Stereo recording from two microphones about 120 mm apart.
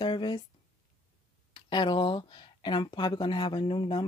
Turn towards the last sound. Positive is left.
turn(degrees=40)  # may be behind; listen again after turning